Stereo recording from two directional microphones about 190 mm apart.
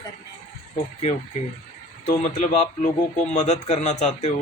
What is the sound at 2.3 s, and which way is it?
Speech, 35° left (ahead or behind).